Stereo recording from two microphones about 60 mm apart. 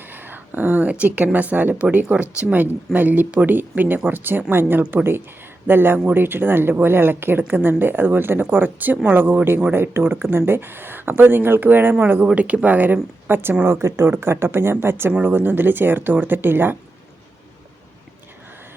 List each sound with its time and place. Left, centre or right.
0.1 s a woman's voice: right
13.7 s speech: right